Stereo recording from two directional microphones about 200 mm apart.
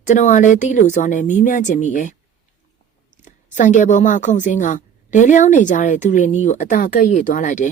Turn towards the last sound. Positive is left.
turn(degrees=40)  # may be behind; listen again after turning